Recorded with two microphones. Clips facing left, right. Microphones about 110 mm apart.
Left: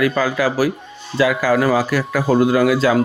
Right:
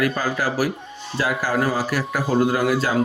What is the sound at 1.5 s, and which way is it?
Speech, 90° left.